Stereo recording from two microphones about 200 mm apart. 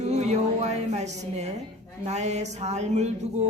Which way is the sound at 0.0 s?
35° right (ahead or behind).